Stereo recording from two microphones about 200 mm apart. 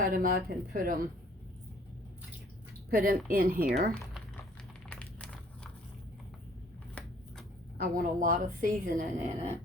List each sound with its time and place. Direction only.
0.0 s a woman's voice: 45° right (ahead or behind)
2.9 s a woman's voice: 45° right (ahead or behind)
4.9 s a sound: 5° left (ahead or behind)
7.8 s a woman's voice: 45° right (ahead or behind)